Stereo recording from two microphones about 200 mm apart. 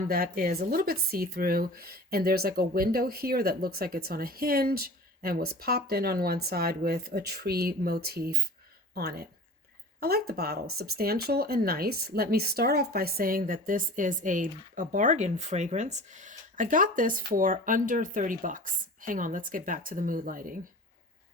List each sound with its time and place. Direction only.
0.0 s speech: 45° right (ahead or behind)